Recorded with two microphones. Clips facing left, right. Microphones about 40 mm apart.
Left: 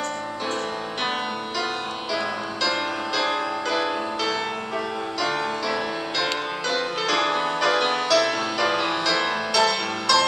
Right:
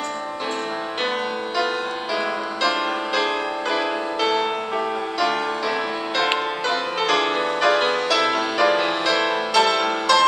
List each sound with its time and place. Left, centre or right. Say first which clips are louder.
3.7 s music: right 2 dB; centre